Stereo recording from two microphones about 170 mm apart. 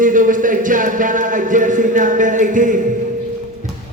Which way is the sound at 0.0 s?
50° right (ahead or behind).